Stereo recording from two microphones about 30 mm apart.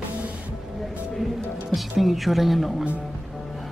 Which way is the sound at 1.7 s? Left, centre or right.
Centre.